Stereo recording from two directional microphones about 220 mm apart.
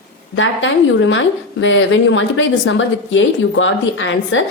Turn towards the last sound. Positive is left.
turn(degrees=55)  # may be behind; listen again after turning